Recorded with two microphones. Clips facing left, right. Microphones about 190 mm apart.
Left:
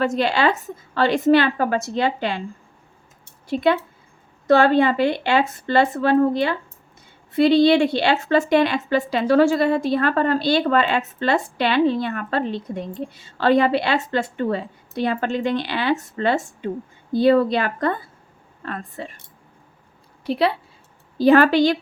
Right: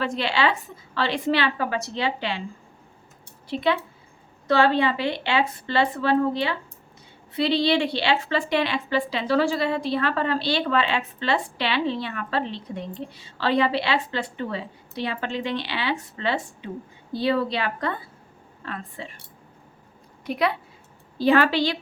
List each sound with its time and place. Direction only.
0.0 s a woman's voice: 45° left (ahead or behind)
3.4 s a woman's voice: 45° left (ahead or behind)
20.2 s a woman's voice: 30° left (ahead or behind)
21.2 s a woman's voice: 45° left (ahead or behind)